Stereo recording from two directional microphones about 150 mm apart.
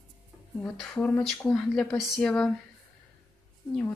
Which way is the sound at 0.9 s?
15° left (ahead or behind).